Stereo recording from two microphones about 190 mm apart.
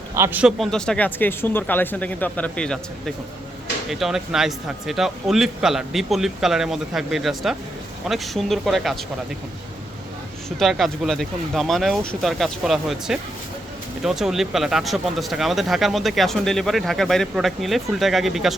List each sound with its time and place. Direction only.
0.1 s speech: 10° right (ahead or behind); by 2.7 s 5° left (ahead or behind)
3.8 s speech: centre (ahead or behind)
10.6 s speech: centre (ahead or behind)